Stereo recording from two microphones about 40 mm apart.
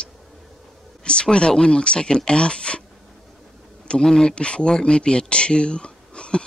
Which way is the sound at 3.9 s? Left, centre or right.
Centre.